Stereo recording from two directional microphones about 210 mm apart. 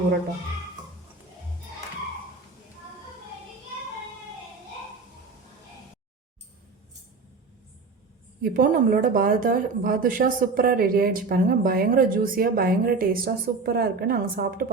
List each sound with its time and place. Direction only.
8.4 s speech: 40° right (ahead or behind)